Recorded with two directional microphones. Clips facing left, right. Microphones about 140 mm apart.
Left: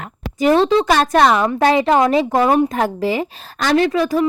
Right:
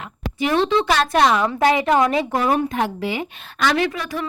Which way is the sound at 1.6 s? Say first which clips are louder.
Left 3 dB; 30° left (ahead or behind).